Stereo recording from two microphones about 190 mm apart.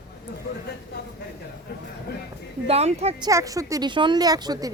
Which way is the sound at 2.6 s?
35° right (ahead or behind).